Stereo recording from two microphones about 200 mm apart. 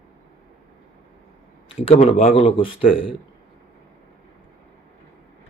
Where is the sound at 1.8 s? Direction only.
30° left (ahead or behind).